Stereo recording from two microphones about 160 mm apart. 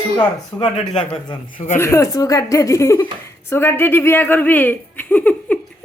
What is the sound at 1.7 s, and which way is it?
Speech, 15° left (ahead or behind).